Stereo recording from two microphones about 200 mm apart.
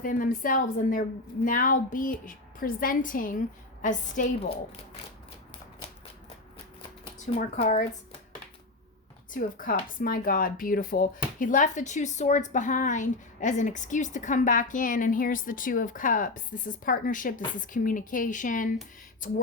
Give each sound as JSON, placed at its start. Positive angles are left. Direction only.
{"t": 0.0, "sound": "a woman's voice", "side_deg": 40}
{"t": 7.3, "sound": "speech", "side_deg": 35}
{"t": 9.3, "sound": "speech", "side_deg": 45}